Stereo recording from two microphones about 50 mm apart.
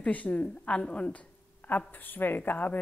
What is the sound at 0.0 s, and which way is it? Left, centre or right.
A woman's voice, left.